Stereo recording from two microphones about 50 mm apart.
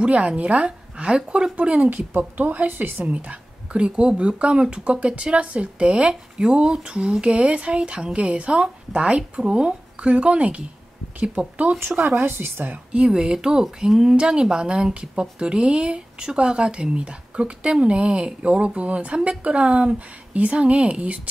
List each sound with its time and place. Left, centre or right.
0.0 s a woman's voice: right
3.1 s speech: right
12.2 s a woman's voice: right
12.9 s speech: centre